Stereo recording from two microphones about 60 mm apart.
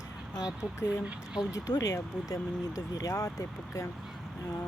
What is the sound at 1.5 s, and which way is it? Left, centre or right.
Speech, left.